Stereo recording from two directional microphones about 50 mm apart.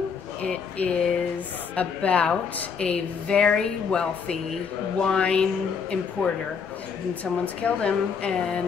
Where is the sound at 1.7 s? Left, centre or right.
Left.